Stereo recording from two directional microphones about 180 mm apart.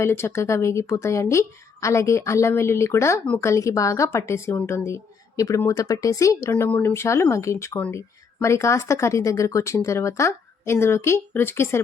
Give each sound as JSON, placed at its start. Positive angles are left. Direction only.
{"t": 0.0, "sound": "speech", "side_deg": 15}